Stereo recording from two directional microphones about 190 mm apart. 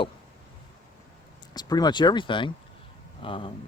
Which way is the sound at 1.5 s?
20° left (ahead or behind).